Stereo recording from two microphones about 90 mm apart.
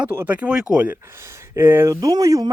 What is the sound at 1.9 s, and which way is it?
Speech, 45° right (ahead or behind).